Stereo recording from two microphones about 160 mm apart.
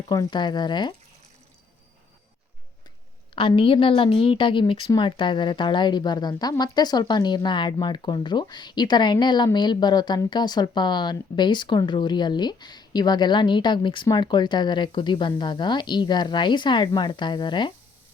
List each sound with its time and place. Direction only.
0.1 s a woman's voice: 25° left (ahead or behind)
3.3 s a woman's voice: 35° left (ahead or behind)